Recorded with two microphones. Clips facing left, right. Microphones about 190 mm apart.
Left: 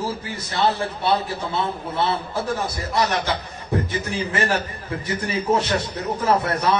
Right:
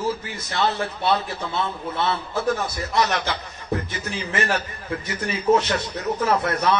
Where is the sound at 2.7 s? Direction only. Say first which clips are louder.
Even; 30° left (ahead or behind).